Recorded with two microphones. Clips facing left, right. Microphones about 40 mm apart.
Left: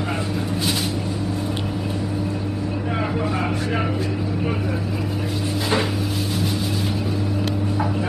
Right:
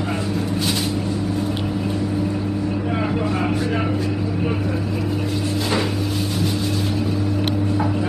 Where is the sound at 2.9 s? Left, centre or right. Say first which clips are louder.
Even; centre.